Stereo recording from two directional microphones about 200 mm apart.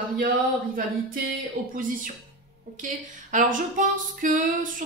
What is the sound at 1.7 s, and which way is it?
Speech, 40° right (ahead or behind).